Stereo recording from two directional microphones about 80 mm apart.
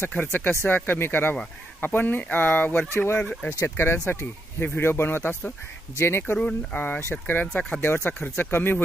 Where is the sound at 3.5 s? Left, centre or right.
Left.